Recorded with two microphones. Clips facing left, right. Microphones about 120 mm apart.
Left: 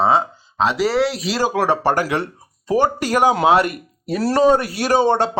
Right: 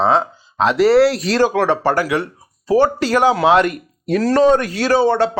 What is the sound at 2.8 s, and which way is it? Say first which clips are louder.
Speech: right 2 dB; 15° left (ahead or behind).